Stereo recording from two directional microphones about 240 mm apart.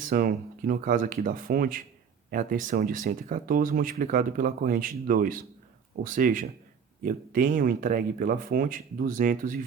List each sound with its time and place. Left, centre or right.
0.0 s speech: right